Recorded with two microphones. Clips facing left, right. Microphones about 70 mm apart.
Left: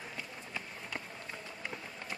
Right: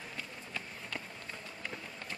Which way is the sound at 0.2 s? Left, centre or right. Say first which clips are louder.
Right 1 dB; centre.